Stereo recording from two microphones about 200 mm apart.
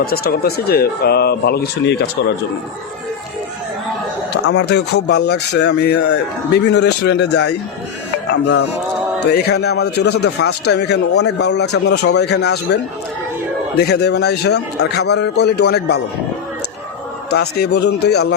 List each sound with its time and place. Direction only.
0.0 s speech: 50° left (ahead or behind)
4.4 s a man's voice: 75° left (ahead or behind); by 7.5 s 60° left (ahead or behind)
9.2 s a man's voice: 55° left (ahead or behind)
13.8 s a man's voice: 55° left (ahead or behind)
17.6 s a man's voice: 60° left (ahead or behind)